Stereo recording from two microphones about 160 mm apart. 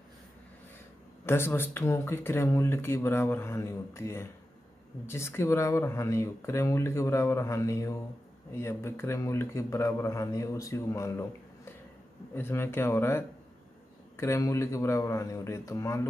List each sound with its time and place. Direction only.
1.2 s a man's voice: 15° left (ahead or behind)